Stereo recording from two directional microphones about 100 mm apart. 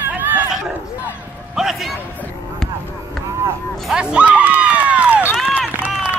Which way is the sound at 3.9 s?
10° right (ahead or behind).